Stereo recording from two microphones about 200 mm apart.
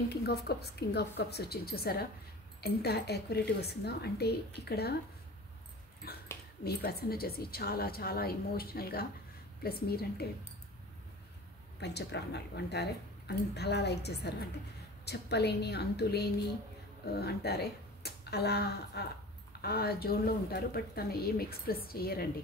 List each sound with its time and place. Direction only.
0.1 s speech: 55° left (ahead or behind)
6.0 s speech: 50° left (ahead or behind)
11.8 s speech: 55° left (ahead or behind)